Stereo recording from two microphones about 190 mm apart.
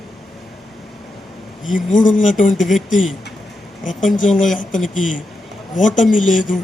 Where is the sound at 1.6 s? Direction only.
45° left (ahead or behind).